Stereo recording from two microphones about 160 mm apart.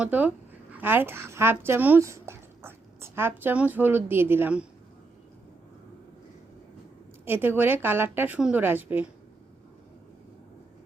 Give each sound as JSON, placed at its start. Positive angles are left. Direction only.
{"t": 0.0, "sound": "a woman's voice", "side_deg": -10}
{"t": 7.3, "sound": "a woman's voice", "side_deg": -10}